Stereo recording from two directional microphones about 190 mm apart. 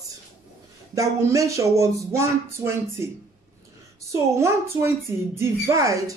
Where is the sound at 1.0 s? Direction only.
15° right (ahead or behind).